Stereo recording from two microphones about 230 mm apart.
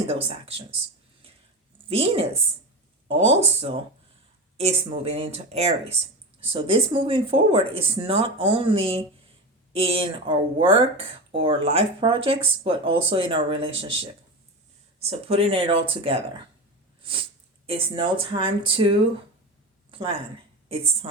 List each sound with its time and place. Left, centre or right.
0.1 s speech: right
1.9 s speech: right
17.0 s a sound: right
17.7 s speech: right